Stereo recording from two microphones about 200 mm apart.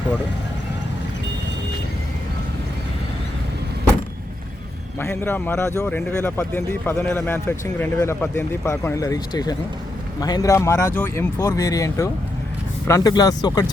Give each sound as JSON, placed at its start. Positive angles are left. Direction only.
{"t": 4.9, "sound": "a man's voice", "side_deg": 10}